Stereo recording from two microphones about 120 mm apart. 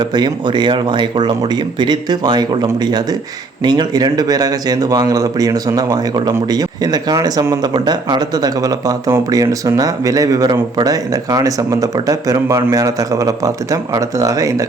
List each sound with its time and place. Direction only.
0.0 s a man's voice: 35° right (ahead or behind)